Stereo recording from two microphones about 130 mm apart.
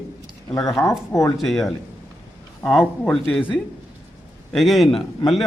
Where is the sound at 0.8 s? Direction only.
25° left (ahead or behind).